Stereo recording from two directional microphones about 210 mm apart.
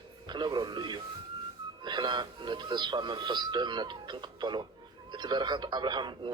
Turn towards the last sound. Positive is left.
turn(degrees=-20)  # may be behind; listen again after turning